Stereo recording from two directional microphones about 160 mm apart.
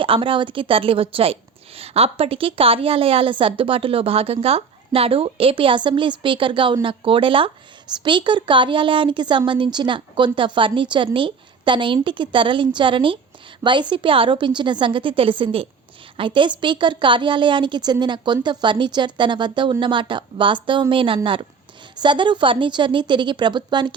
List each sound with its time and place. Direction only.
0.0 s a woman's voice: 35° right (ahead or behind)